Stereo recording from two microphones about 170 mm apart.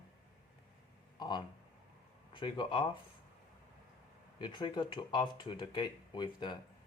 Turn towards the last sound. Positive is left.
turn(degrees=25)  # may be behind; listen again after turning